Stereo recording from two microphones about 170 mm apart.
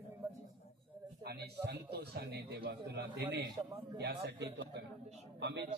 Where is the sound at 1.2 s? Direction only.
70° right (ahead or behind).